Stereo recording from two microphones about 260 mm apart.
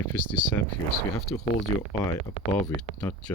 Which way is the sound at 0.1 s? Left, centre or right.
Centre.